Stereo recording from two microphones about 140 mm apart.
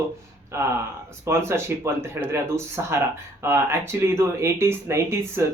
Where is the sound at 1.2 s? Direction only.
20° right (ahead or behind).